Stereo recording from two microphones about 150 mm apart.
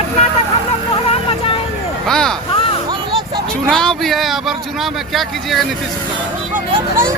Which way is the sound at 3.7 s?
5° left (ahead or behind).